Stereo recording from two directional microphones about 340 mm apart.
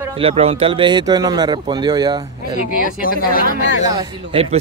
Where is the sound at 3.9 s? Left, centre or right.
Centre.